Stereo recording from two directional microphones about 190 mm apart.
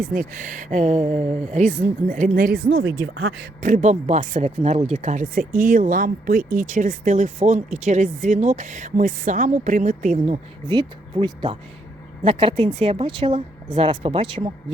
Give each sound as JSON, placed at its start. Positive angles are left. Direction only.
{"t": 0.0, "sound": "speech", "side_deg": -45}
{"t": 2.6, "sound": "speech", "side_deg": -80}
{"t": 3.6, "sound": "speech", "side_deg": -40}
{"t": 10.7, "sound": "a woman's voice", "side_deg": -25}